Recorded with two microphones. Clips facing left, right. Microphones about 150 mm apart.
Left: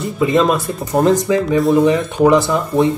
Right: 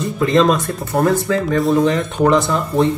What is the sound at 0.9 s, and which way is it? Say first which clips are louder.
Speech: left 3 dB; 15° left (ahead or behind).